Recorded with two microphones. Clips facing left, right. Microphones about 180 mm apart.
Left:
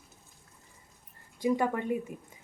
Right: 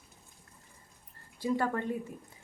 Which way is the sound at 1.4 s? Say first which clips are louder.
Left 3 dB; 15° left (ahead or behind).